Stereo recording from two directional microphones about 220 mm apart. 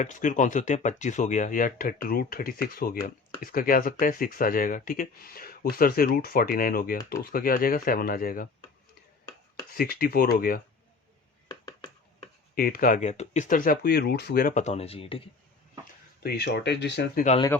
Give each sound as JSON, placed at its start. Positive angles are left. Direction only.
{"t": 0.0, "sound": "speech", "side_deg": 35}
{"t": 9.7, "sound": "speech", "side_deg": 40}
{"t": 12.5, "sound": "speech", "side_deg": 40}
{"t": 16.2, "sound": "speech", "side_deg": 45}